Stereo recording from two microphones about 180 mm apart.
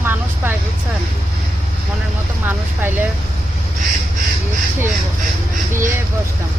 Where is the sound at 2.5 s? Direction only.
10° right (ahead or behind).